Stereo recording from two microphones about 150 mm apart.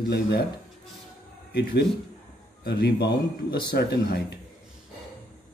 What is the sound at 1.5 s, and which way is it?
Speech, 90° left.